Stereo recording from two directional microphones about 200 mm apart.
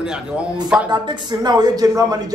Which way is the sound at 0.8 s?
20° right (ahead or behind).